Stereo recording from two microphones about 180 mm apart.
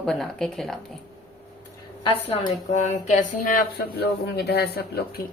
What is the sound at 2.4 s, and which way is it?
Speech, 40° left (ahead or behind).